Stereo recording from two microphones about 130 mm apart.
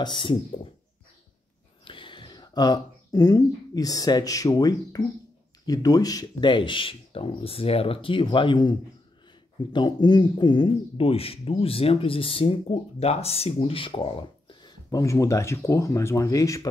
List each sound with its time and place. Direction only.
0.0 s speech: 40° left (ahead or behind)
1.9 s speech: 40° left (ahead or behind)